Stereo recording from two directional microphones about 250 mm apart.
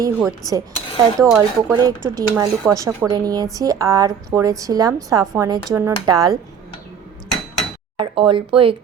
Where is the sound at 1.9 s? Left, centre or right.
Centre.